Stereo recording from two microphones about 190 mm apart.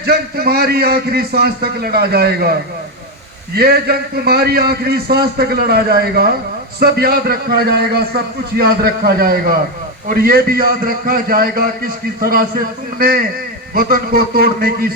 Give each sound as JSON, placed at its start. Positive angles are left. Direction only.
{"t": 0.0, "sound": "a man's voice", "side_deg": -55}